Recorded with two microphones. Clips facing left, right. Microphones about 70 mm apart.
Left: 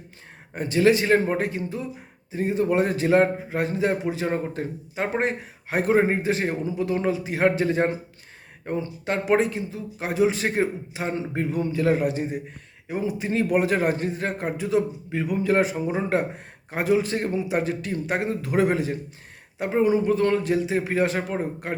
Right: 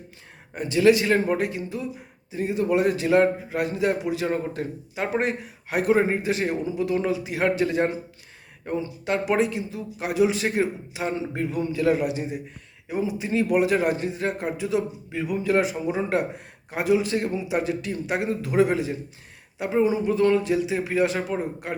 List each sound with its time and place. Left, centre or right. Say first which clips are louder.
0.5 s a man's voice: right 1 dB; left